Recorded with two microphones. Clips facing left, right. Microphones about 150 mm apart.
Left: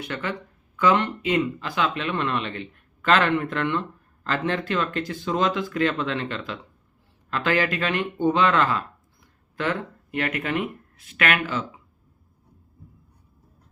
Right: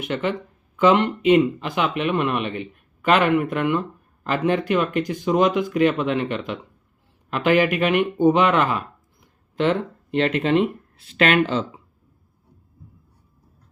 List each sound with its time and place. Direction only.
0.0 s speech: 20° right (ahead or behind)